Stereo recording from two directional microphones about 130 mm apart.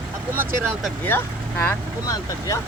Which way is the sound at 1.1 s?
15° left (ahead or behind).